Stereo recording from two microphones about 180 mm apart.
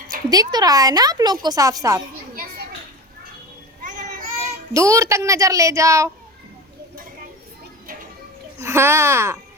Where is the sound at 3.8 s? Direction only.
50° right (ahead or behind).